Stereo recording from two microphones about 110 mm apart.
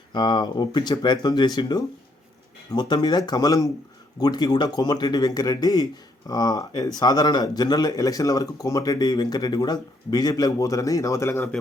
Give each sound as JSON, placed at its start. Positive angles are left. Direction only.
{"t": 0.1, "sound": "speech", "side_deg": 45}